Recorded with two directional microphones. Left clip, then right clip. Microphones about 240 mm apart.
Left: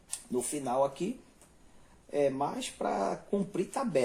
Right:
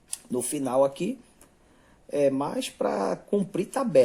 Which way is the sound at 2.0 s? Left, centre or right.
Right.